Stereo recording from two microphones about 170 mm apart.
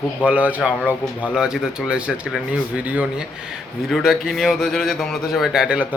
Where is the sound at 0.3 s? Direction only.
10° right (ahead or behind).